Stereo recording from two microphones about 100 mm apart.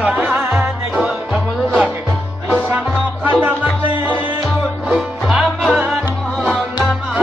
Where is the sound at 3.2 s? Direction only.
15° right (ahead or behind).